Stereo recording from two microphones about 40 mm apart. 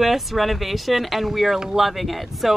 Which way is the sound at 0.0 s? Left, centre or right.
Centre.